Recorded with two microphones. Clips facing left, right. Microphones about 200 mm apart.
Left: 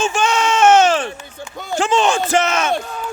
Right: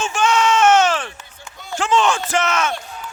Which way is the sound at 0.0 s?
30° left (ahead or behind).